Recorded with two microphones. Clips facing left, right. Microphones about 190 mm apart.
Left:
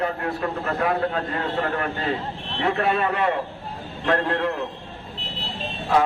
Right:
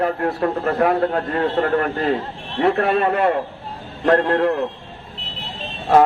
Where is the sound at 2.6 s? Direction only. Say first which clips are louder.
Right 5 dB; 45° right (ahead or behind).